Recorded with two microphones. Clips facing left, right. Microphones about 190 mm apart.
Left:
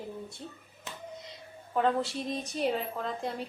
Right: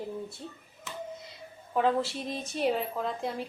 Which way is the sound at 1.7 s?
Centre (ahead or behind).